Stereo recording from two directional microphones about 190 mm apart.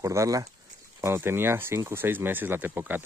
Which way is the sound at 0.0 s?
15° right (ahead or behind).